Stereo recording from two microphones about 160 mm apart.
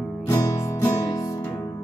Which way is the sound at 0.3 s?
20° left (ahead or behind).